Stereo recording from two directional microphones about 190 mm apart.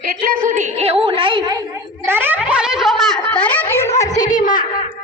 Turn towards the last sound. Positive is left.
turn(degrees=45)  # may be behind; listen again after turning